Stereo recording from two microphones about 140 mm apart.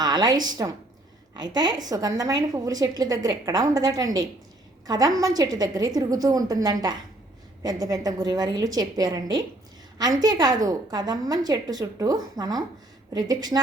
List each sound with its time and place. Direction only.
0.0 s a woman's voice: 30° right (ahead or behind)